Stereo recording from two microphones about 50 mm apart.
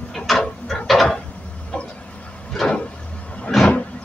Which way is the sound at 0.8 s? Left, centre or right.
Centre.